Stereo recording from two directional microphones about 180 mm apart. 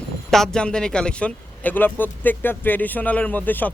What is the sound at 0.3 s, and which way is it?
A man's voice, centre (ahead or behind).